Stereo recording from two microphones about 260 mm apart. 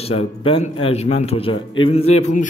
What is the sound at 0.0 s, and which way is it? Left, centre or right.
Speech, left.